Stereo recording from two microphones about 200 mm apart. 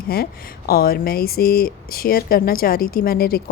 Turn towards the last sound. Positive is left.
turn(degrees=50)  # may be behind; listen again after turning